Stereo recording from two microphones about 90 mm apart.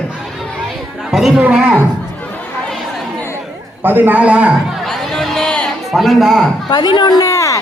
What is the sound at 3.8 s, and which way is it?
Speech, 20° right (ahead or behind).